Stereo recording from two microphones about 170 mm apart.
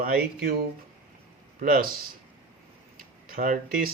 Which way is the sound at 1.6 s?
60° right (ahead or behind).